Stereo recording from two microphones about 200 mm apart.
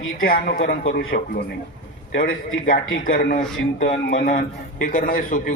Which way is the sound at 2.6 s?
45° left (ahead or behind).